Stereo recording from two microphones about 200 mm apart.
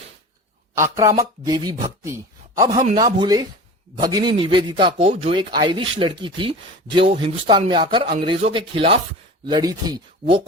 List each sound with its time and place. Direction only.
0.8 s speech: 15° right (ahead or behind)
2.1 s a sound: 15° right (ahead or behind)
2.7 s speech: 30° right (ahead or behind)
3.0 s speech: 20° right (ahead or behind)